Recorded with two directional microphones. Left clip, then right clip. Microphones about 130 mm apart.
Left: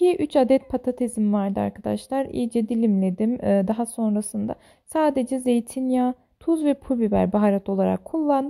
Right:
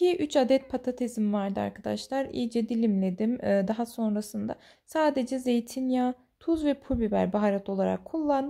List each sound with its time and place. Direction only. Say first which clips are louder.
0.0 s a woman's voice: left 5 dB; 45° left (ahead or behind)